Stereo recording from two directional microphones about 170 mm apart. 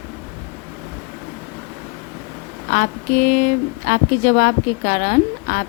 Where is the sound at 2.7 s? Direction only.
50° left (ahead or behind).